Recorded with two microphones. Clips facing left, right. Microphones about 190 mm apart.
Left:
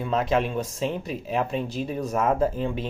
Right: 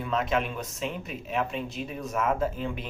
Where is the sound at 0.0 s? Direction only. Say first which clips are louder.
Left 4 dB; 35° left (ahead or behind).